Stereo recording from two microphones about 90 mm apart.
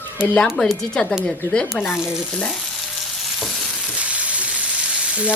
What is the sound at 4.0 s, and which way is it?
Frying, 15° right (ahead or behind).